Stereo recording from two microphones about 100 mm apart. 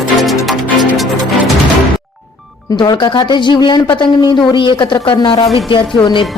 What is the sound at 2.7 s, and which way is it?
A woman's voice, 50° left (ahead or behind).